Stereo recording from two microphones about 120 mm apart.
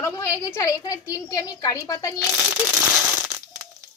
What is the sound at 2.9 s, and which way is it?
Crushing, 15° right (ahead or behind).